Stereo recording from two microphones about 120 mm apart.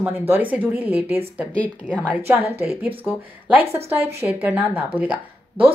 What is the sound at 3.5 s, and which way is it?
Speech, 15° right (ahead or behind).